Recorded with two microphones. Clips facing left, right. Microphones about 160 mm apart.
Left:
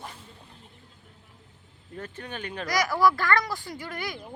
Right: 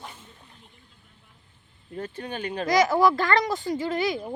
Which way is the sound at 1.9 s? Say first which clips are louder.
Right 4 dB; 30° right (ahead or behind).